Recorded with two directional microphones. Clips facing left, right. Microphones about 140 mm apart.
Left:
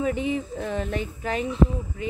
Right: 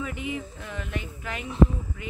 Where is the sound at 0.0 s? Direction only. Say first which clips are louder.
Left 7 dB; 30° left (ahead or behind).